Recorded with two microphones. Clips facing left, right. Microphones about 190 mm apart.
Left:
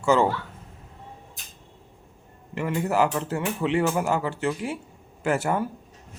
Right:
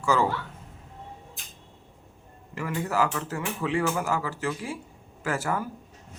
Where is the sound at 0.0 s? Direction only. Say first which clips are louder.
Left 4 dB; 25° left (ahead or behind).